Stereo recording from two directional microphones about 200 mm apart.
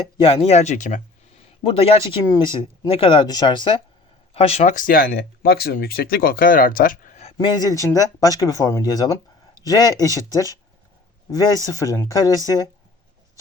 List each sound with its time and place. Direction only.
0.2 s speech: 30° left (ahead or behind)
1.6 s speech: 30° left (ahead or behind)
7.3 s speech: 20° left (ahead or behind)